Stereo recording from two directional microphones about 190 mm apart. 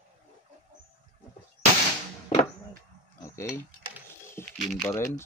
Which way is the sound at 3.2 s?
15° left (ahead or behind).